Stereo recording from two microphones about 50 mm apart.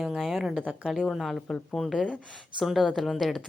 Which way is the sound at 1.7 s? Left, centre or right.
Centre.